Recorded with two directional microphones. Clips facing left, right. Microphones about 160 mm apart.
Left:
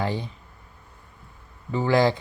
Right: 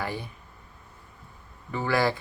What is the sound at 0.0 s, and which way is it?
Speech, 20° left (ahead or behind).